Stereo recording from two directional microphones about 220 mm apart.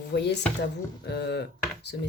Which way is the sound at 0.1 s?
50° left (ahead or behind).